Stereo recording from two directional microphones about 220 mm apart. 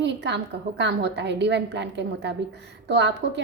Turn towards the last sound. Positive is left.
turn(degrees=-50)  # may be behind; listen again after turning